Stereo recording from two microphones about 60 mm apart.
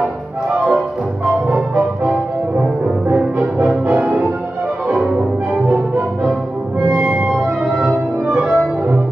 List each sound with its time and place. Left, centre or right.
3.1 s music: right
4.9 s music: centre
6.9 s music: right
7.8 s music: right